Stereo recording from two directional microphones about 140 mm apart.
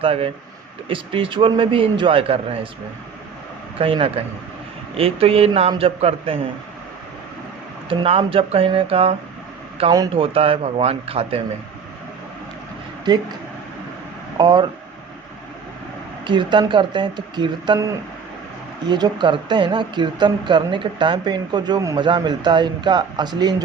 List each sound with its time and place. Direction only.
0.0 s a man's voice: 40° right (ahead or behind)
3.8 s a man's voice: 40° right (ahead or behind)
7.9 s a man's voice: 40° right (ahead or behind)
13.1 s speech: 30° right (ahead or behind)
14.3 s speech: 30° right (ahead or behind)
16.2 s speech: 35° right (ahead or behind)
18.9 s speech: 30° right (ahead or behind)